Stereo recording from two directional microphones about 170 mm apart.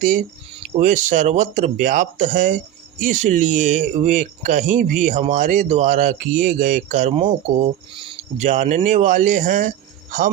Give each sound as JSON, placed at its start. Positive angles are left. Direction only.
{"t": 0.8, "sound": "speech", "side_deg": -45}